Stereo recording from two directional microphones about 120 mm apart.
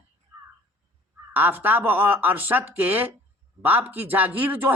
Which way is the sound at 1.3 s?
15° right (ahead or behind).